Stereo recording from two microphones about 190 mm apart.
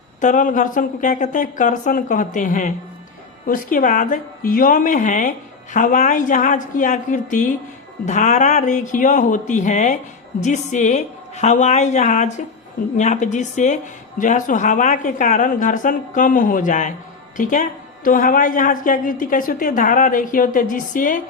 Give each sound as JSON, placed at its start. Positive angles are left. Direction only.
{"t": 0.2, "sound": "a woman's voice", "side_deg": 40}